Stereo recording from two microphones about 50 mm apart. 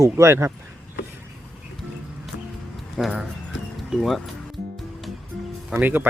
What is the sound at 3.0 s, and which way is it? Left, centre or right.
Speech, centre.